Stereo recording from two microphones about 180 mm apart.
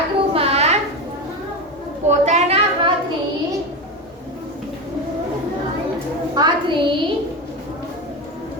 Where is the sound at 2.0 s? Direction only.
40° right (ahead or behind).